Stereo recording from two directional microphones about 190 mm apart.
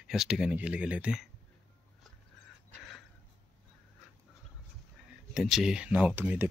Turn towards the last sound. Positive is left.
turn(degrees=-10)  # may be behind; listen again after turning